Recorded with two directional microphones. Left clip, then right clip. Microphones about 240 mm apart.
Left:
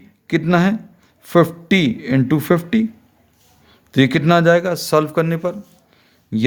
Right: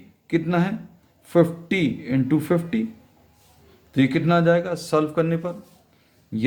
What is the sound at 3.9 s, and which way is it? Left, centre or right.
A man's voice, left.